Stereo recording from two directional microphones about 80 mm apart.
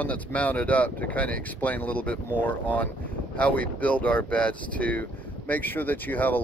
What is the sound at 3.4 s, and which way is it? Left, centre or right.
Speech, centre.